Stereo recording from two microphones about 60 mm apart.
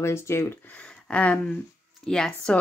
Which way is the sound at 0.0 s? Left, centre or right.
Left.